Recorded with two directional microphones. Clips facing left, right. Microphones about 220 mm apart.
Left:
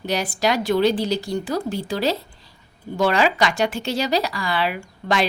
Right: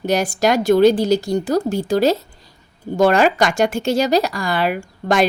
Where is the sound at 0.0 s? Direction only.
45° right (ahead or behind).